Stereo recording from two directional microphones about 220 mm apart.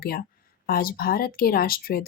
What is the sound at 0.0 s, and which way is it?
Speech, 45° left (ahead or behind).